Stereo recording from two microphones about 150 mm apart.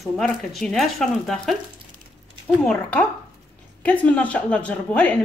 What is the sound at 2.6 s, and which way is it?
Speech, 5° left (ahead or behind).